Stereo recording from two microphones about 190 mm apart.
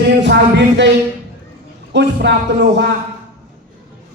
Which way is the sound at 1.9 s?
65° right (ahead or behind).